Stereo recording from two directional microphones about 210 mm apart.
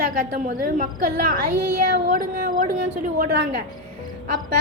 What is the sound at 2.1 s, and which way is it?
A woman's voice, 40° right (ahead or behind).